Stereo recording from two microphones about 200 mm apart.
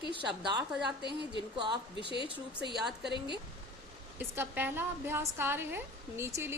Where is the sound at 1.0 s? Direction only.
25° left (ahead or behind).